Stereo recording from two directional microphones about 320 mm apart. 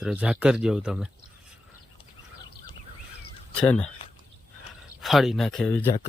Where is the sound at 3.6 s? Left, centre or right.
Centre.